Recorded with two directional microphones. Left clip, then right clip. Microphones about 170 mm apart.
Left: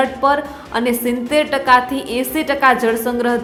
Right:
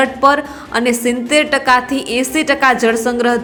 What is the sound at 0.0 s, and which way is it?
A woman's voice, 15° right (ahead or behind).